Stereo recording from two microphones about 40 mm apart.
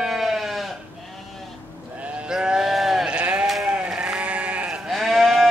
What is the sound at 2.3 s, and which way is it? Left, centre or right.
Sheep, centre.